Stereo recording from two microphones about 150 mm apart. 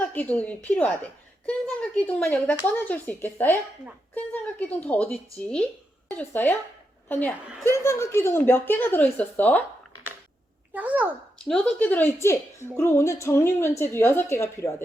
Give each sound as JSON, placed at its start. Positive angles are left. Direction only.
{"t": 0.1, "sound": "a woman's voice", "side_deg": 10}
{"t": 10.8, "sound": "a child's voice", "side_deg": -10}
{"t": 11.4, "sound": "a woman's voice", "side_deg": 10}